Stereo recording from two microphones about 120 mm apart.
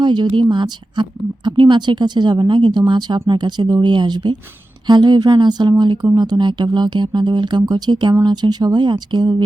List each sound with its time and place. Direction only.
0.0 s speech: 40° right (ahead or behind)